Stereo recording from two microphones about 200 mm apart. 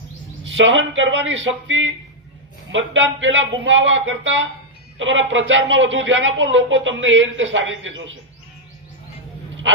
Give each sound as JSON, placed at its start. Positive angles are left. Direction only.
{"t": 0.4, "sound": "a man's voice", "side_deg": -70}